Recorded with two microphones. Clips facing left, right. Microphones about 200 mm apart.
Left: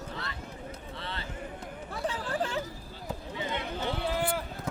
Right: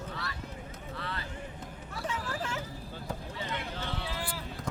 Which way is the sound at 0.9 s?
25° left (ahead or behind).